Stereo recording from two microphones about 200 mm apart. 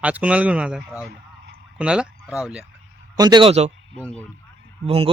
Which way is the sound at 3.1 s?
20° right (ahead or behind).